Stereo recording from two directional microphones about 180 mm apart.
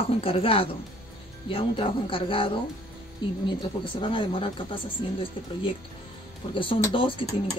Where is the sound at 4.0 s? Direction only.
30° left (ahead or behind).